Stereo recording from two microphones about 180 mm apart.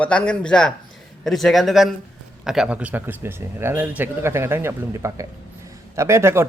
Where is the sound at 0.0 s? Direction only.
5° left (ahead or behind).